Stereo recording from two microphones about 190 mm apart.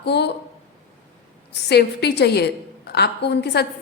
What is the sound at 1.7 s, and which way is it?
A woman's voice, 60° left (ahead or behind).